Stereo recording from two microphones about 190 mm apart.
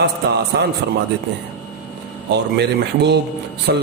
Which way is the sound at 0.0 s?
65° right (ahead or behind).